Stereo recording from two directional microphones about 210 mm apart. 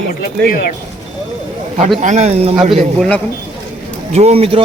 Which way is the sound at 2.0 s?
35° right (ahead or behind).